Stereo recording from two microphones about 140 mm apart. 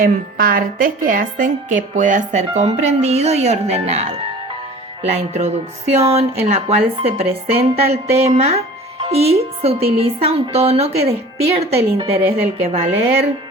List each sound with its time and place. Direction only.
0.0 s a woman's voice: 90° right; by 12.8 s 45° right (ahead or behind)